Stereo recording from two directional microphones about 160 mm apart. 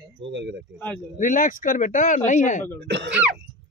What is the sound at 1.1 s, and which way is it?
Speech, 55° left (ahead or behind).